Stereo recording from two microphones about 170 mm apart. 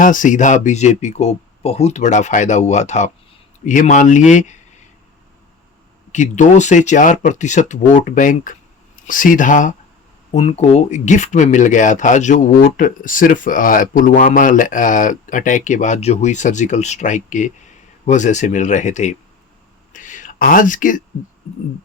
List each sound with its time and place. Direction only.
0.0 s speech: 50° left (ahead or behind)
6.1 s speech: 45° left (ahead or behind)
19.9 s a sound: 50° left (ahead or behind)